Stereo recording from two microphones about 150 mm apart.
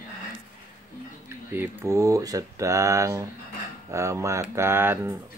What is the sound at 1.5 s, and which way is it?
Speech, 20° right (ahead or behind).